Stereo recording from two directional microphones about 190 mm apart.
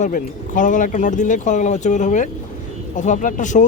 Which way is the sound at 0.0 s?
45° left (ahead or behind).